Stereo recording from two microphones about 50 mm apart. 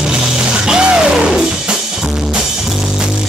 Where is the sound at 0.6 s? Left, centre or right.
Centre.